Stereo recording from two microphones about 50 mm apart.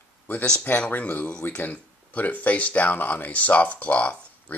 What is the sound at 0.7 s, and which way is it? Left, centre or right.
Speech, left.